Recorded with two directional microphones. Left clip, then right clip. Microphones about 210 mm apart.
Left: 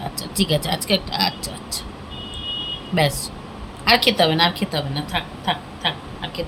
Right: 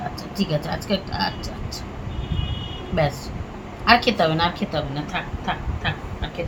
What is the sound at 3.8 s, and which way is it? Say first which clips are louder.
A woman's voice: left 1 dB; 30° left (ahead or behind).